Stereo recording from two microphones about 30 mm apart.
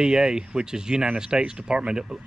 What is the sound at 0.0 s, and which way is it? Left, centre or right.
Speech, right.